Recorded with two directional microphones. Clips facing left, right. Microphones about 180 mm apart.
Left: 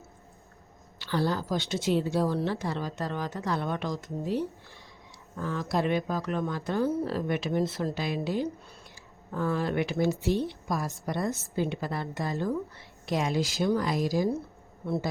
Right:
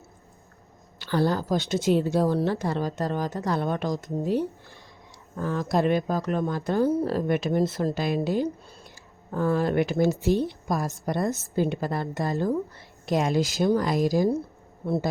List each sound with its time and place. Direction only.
0.9 s a woman's voice: 45° right (ahead or behind)